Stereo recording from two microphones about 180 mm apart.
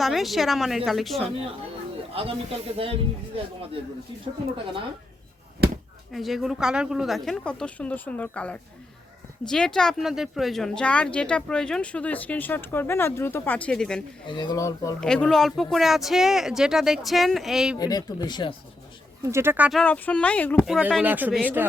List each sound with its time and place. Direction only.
0.0 s speech: centre (ahead or behind)
2.2 s speech: 30° right (ahead or behind)
6.1 s speech: centre (ahead or behind)
14.3 s speech: 25° left (ahead or behind)
15.0 s speech: 5° left (ahead or behind)
17.7 s speech: 20° left (ahead or behind)
19.2 s speech: 15° right (ahead or behind)
19.8 s speech: 5° left (ahead or behind)
20.7 s speech: 5° right (ahead or behind)